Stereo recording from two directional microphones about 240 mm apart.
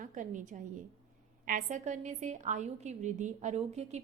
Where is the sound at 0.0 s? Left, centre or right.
Right.